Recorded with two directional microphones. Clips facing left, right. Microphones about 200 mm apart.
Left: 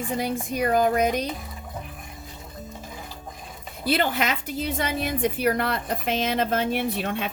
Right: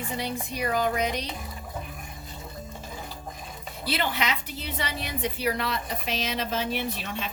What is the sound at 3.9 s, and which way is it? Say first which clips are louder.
A woman's voice: left 4 dB; 50° left (ahead or behind).